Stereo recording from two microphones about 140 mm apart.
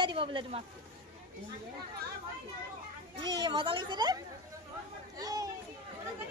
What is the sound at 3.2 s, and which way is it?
A woman's voice, 30° right (ahead or behind).